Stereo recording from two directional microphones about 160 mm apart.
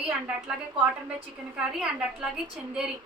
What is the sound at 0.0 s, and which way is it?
A woman's voice, 5° right (ahead or behind).